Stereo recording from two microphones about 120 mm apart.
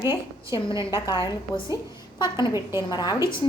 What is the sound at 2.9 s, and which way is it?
Speech, 35° left (ahead or behind).